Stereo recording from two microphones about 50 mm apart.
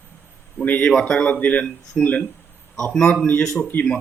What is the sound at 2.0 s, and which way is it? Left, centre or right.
Speech, centre.